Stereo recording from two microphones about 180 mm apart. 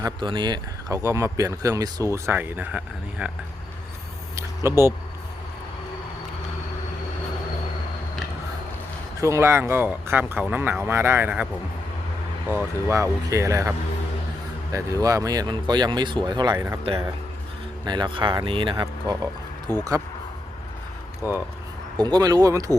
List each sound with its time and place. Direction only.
0.0 s speech: 25° right (ahead or behind); by 3.3 s 5° right (ahead or behind)
4.4 s speech: 15° right (ahead or behind)
9.2 s speech: 15° right (ahead or behind)
12.5 s speech: 15° right (ahead or behind)
17.8 s speech: 25° right (ahead or behind)
21.9 s speech: 25° right (ahead or behind)